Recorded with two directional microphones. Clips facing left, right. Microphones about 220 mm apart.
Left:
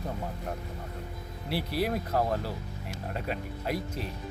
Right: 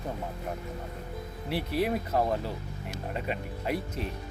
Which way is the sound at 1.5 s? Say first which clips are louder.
Right 1 dB; 35° left (ahead or behind).